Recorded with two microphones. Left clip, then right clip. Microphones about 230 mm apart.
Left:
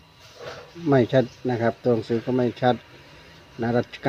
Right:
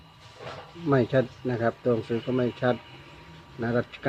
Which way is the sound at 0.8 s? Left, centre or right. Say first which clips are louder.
Left 4 dB; left.